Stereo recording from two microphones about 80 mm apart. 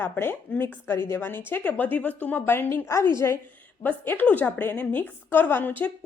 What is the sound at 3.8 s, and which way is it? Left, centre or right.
A woman's voice, left.